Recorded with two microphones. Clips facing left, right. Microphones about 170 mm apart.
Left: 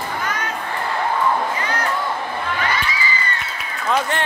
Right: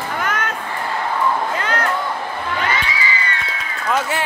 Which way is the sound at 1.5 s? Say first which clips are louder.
Right 2 dB; 65° right (ahead or behind).